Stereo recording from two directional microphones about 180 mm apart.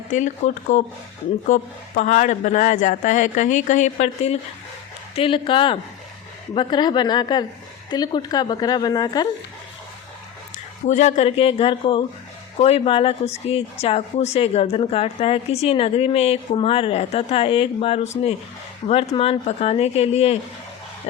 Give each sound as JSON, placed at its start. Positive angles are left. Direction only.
{"t": 0.1, "sound": "a woman's voice", "side_deg": 45}
{"t": 10.8, "sound": "a woman's voice", "side_deg": 40}